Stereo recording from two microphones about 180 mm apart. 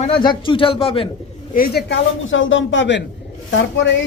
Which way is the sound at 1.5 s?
60° left (ahead or behind).